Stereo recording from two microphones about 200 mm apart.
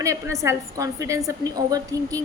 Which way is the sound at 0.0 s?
15° right (ahead or behind).